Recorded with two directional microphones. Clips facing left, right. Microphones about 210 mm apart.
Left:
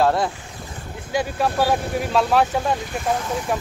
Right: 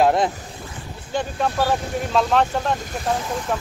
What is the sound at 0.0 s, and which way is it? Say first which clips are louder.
Speech: right 2 dB; 20° right (ahead or behind).